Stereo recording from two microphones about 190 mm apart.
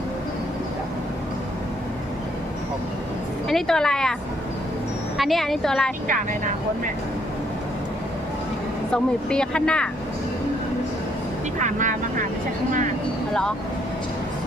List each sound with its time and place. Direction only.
3.5 s speech: 5° left (ahead or behind)
5.1 s speech: centre (ahead or behind)
8.9 s speech: 5° left (ahead or behind)
11.6 s speech: 40° right (ahead or behind)